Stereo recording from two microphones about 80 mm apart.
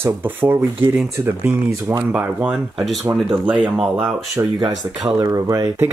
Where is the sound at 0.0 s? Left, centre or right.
Right.